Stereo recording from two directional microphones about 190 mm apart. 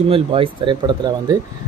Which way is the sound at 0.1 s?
30° right (ahead or behind).